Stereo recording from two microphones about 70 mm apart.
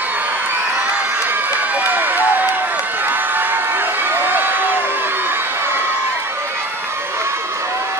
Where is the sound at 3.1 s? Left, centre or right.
Right.